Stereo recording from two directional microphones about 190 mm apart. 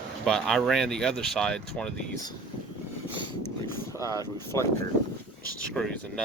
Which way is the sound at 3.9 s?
15° left (ahead or behind).